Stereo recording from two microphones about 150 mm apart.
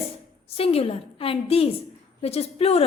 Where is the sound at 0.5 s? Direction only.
40° left (ahead or behind).